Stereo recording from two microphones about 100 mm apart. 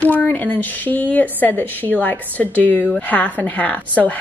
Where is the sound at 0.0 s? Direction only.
15° left (ahead or behind).